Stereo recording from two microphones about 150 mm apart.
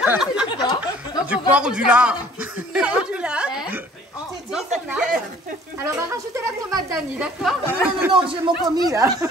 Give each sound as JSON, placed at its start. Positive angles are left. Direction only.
{"t": 0.0, "sound": "a man's voice", "side_deg": -5}
{"t": 0.5, "sound": "speech", "side_deg": 30}
{"t": 1.3, "sound": "a man's voice", "side_deg": -5}
{"t": 2.7, "sound": "chuckle", "side_deg": -10}
{"t": 4.8, "sound": "speech", "side_deg": -5}
{"t": 5.8, "sound": "a man's voice", "side_deg": -20}
{"t": 8.3, "sound": "speech", "side_deg": -30}